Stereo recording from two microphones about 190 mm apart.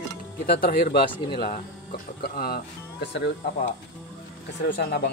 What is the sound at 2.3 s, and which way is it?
Speech, 55° left (ahead or behind).